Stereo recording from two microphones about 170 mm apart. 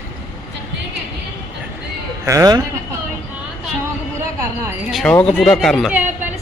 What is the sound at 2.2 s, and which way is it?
Speech, 20° right (ahead or behind).